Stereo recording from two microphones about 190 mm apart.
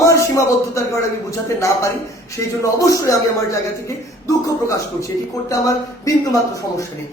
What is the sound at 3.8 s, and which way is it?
A man's voice, 15° left (ahead or behind).